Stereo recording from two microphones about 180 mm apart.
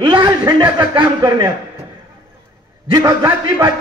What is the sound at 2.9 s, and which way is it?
Speech, 20° right (ahead or behind).